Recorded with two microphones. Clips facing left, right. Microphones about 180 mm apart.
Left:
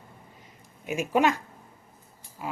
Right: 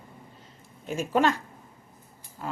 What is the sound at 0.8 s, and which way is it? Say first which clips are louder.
Speech: even; 15° left (ahead or behind).